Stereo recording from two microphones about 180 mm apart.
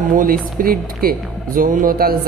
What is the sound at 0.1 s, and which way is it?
Speech, 50° right (ahead or behind).